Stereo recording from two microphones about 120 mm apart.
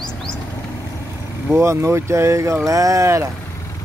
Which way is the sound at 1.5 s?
25° right (ahead or behind).